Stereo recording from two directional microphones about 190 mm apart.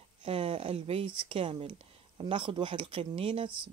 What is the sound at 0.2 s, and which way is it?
Speech, 30° right (ahead or behind).